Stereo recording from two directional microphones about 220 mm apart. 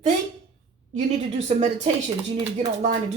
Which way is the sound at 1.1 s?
30° right (ahead or behind).